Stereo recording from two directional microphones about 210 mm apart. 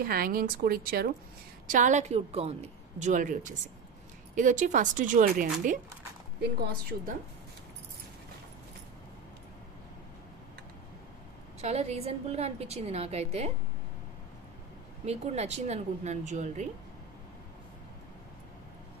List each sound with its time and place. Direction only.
0.0 s a woman's voice: 45° right (ahead or behind)
11.6 s a woman's voice: 30° right (ahead or behind)
15.0 s a woman's voice: 30° right (ahead or behind)